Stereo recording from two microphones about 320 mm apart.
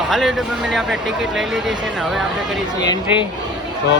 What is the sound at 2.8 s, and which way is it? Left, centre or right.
Speech, centre.